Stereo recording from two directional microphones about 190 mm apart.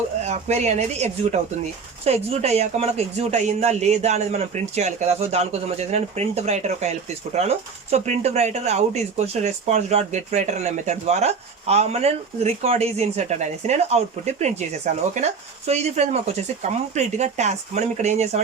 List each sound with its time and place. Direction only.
0.3 s speech: 35° right (ahead or behind)